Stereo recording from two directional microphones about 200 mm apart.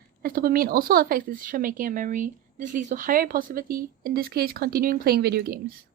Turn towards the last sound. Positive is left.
turn(degrees=-50)  # may be behind; listen again after turning